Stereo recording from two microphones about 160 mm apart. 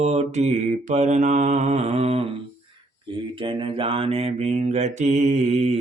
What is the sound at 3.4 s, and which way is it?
Mantra, 30° right (ahead or behind).